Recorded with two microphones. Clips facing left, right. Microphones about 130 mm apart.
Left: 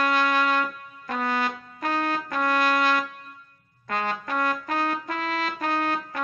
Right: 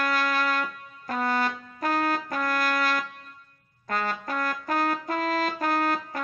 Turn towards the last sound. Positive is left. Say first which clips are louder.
# right 1 dB
turn(degrees=-40)  # may be behind; listen again after turning